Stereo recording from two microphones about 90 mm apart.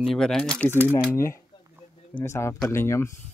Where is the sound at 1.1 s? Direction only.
30° left (ahead or behind).